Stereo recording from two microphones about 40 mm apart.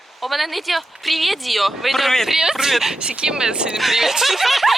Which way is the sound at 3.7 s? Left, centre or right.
Centre.